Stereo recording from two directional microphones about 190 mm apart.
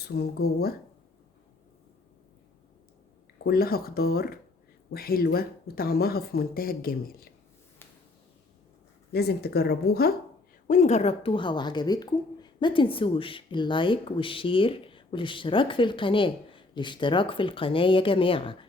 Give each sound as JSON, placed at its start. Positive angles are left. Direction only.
{"t": 0.0, "sound": "speech", "side_deg": 60}
{"t": 3.3, "sound": "speech", "side_deg": 55}
{"t": 9.1, "sound": "speech", "side_deg": 55}
{"t": 10.7, "sound": "a woman's voice", "side_deg": 35}